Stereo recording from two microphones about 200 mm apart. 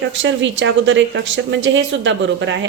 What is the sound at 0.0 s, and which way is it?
Speech, 70° right (ahead or behind).